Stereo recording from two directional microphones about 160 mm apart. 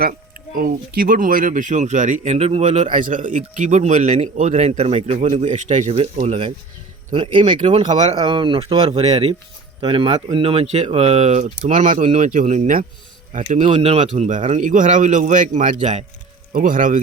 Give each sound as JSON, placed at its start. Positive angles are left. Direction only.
{"t": 0.0, "sound": "speech", "side_deg": -60}
{"t": 9.0, "sound": "speech", "side_deg": -40}
{"t": 13.7, "sound": "speech", "side_deg": -40}
{"t": 16.5, "sound": "speech", "side_deg": -60}